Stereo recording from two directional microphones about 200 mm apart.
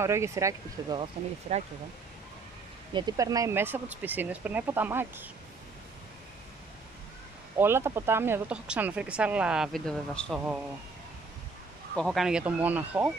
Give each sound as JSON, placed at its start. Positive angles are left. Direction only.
{"t": 0.0, "sound": "speech", "side_deg": -15}
{"t": 1.5, "sound": "speech", "side_deg": -30}
{"t": 2.9, "sound": "speech", "side_deg": -20}
{"t": 7.5, "sound": "speech", "side_deg": -10}
{"t": 11.9, "sound": "speech", "side_deg": 5}